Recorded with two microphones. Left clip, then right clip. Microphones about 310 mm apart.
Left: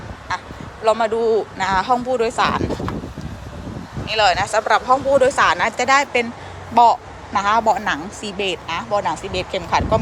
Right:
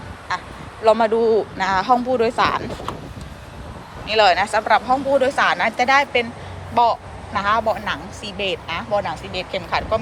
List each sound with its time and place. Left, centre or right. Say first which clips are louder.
0.3 s speech: even; centre
4.0 s speech: right 1 dB; centre